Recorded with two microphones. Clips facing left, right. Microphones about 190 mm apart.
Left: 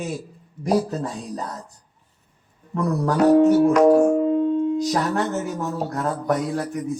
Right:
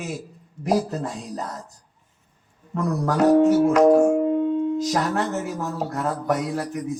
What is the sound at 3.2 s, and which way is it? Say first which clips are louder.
Speech: left 1 dB; centre (ahead or behind).